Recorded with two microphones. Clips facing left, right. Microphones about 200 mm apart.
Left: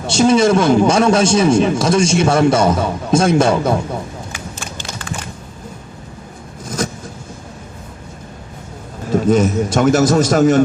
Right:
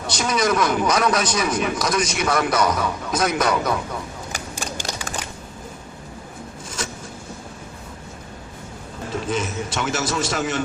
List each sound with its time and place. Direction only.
0.1 s a man's voice: 25° left (ahead or behind)
6.7 s a sound: 40° left (ahead or behind)
9.1 s a man's voice: 40° left (ahead or behind)